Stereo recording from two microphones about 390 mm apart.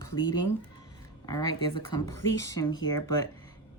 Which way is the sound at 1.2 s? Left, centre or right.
Centre.